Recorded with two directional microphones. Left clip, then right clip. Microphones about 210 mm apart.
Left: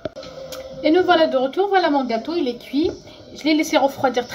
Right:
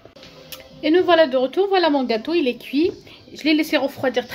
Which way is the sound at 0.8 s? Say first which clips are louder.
Even; 25° right (ahead or behind).